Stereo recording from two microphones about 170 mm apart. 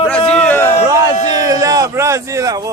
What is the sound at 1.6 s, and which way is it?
Speech, 20° right (ahead or behind).